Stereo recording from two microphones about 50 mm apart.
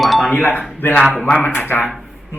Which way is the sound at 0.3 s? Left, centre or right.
Left.